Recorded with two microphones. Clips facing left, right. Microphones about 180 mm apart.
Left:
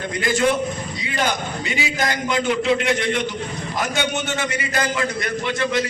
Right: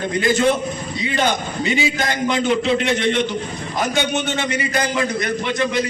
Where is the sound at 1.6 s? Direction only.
25° right (ahead or behind).